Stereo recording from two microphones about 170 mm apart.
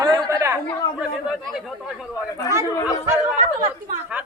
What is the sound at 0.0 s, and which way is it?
Chatter, 20° right (ahead or behind).